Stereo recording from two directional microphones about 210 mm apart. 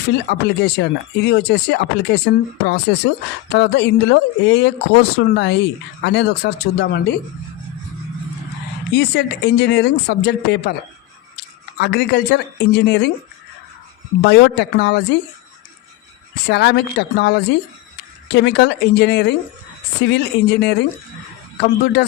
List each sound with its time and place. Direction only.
0.1 s speech: 55° left (ahead or behind)
8.9 s speech: 55° left (ahead or behind)
11.8 s speech: 50° left (ahead or behind)
14.2 s speech: 55° left (ahead or behind)
16.5 s speech: 50° left (ahead or behind)